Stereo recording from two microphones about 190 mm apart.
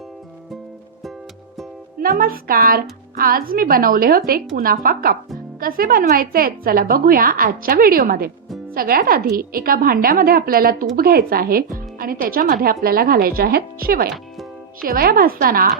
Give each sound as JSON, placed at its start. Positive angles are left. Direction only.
{"t": 2.0, "sound": "a woman's voice", "side_deg": -50}